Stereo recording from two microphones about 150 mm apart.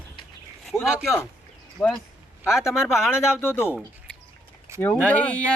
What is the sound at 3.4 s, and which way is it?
Speech, 15° left (ahead or behind).